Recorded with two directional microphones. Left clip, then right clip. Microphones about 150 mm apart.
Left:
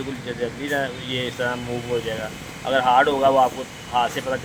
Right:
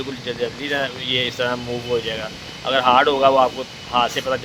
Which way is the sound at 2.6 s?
90° right.